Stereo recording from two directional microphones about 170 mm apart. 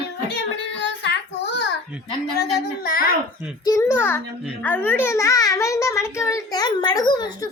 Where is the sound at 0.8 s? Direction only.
90° left.